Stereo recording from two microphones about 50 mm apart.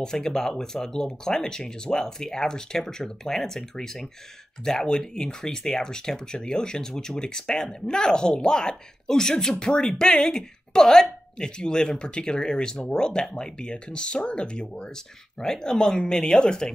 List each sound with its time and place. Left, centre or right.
0.0 s speech: centre